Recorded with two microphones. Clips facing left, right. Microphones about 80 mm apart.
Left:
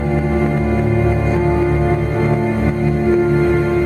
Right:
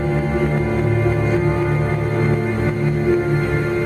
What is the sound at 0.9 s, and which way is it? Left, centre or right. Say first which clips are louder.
Music: left 2 dB; centre.